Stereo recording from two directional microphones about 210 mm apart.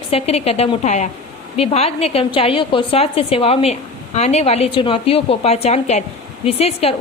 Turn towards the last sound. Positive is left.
turn(degrees=30)  # may be behind; listen again after turning